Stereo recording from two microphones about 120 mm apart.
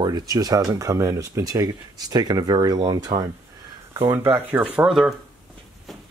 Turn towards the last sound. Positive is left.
turn(degrees=-5)  # may be behind; listen again after turning